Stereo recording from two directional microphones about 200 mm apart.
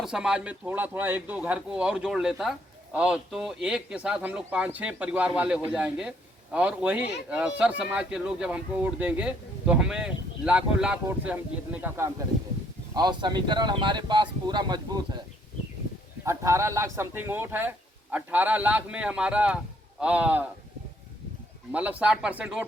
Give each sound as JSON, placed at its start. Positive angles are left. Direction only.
{"t": 0.0, "sound": "a man's voice", "side_deg": -5}
{"t": 12.9, "sound": "speech", "side_deg": -20}
{"t": 16.2, "sound": "speech", "side_deg": -15}
{"t": 21.7, "sound": "speech", "side_deg": -5}